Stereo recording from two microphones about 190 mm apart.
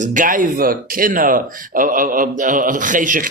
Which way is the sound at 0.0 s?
45° right (ahead or behind).